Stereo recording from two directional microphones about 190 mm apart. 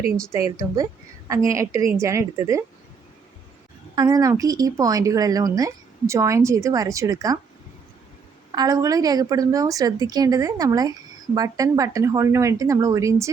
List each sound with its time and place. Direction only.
0.3 s speech: 15° right (ahead or behind)
3.9 s speech: 20° right (ahead or behind)
8.5 s a woman's voice: 20° right (ahead or behind)